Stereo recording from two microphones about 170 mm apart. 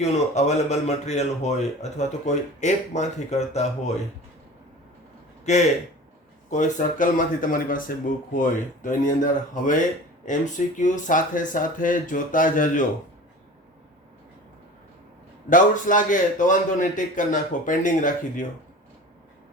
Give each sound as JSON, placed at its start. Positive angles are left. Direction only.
{"t": 0.0, "sound": "speech", "side_deg": 40}
{"t": 6.5, "sound": "speech", "side_deg": 45}
{"t": 15.4, "sound": "speech", "side_deg": 50}